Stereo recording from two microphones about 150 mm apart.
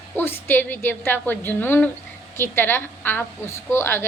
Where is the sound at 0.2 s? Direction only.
15° left (ahead or behind).